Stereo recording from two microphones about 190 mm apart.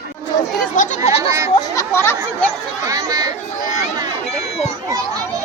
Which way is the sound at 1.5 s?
15° left (ahead or behind).